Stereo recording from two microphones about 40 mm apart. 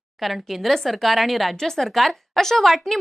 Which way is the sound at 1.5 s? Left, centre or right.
Centre.